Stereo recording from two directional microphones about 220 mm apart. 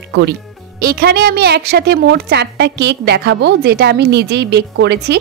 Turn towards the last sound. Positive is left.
turn(degrees=-50)  # may be behind; listen again after turning